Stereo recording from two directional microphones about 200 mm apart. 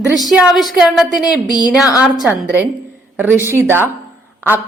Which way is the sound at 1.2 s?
20° left (ahead or behind).